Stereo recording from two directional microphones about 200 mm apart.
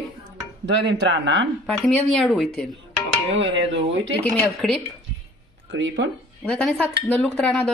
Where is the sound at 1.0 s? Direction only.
65° right (ahead or behind).